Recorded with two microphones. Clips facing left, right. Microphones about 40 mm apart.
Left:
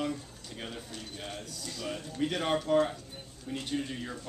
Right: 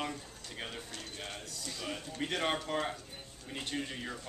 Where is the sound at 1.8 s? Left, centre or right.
Centre.